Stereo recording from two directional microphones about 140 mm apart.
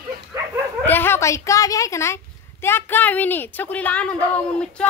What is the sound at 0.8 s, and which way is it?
Speech, 15° left (ahead or behind).